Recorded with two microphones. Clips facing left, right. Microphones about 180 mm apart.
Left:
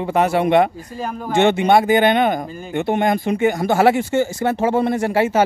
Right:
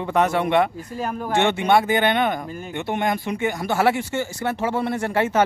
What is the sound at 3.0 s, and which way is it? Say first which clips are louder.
Speech: left 5 dB; 40° left (ahead or behind).